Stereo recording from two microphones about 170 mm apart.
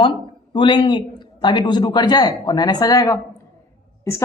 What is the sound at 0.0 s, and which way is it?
Speech, 30° left (ahead or behind).